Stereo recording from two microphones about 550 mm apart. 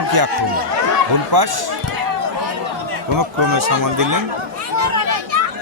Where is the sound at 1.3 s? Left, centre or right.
Right.